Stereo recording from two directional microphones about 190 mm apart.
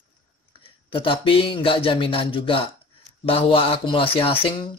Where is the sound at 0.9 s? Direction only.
25° left (ahead or behind).